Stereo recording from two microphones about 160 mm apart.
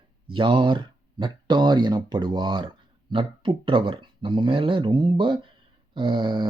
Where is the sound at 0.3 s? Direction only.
30° right (ahead or behind).